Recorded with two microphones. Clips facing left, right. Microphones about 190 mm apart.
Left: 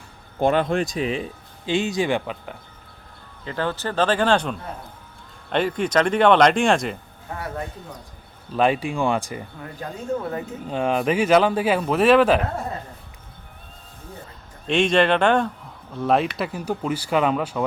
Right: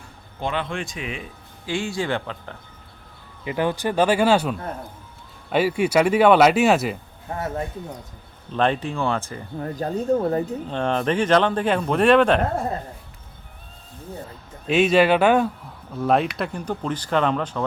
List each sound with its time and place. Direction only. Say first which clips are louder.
0.3 s speech: left 7 dB; 45° left (ahead or behind); by 2.6 s 15° left (ahead or behind)
3.4 s speech: right 3 dB; 15° right (ahead or behind)
7.3 s a man's voice: right 4 dB; 25° right (ahead or behind)
8.5 s speech: left 1 dB; 10° left (ahead or behind)
9.6 s speech: right 8 dB; 40° right (ahead or behind)
10.7 s speech: left 3 dB; 5° left (ahead or behind)
14.7 s speech: right 2 dB; 5° right (ahead or behind)